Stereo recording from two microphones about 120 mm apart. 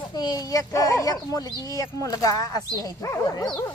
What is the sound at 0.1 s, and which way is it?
Speech, 35° left (ahead or behind).